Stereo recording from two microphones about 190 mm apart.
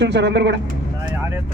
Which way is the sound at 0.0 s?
65° right (ahead or behind).